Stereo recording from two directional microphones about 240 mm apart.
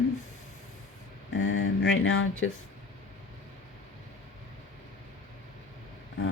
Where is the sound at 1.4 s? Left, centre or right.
Left.